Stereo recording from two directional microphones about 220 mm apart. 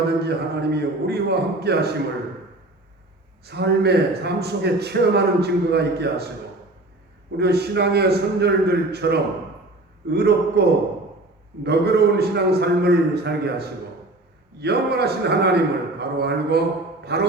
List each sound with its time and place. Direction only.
0.2 s a man's voice: 45° right (ahead or behind)
3.4 s a man's voice: 50° right (ahead or behind)
7.3 s a man's voice: 50° right (ahead or behind)
11.6 s a man's voice: 50° right (ahead or behind)